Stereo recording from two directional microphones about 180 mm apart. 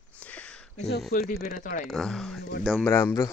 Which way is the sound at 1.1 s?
45° left (ahead or behind).